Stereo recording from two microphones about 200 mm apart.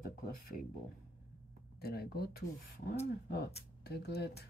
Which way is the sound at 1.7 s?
50° left (ahead or behind).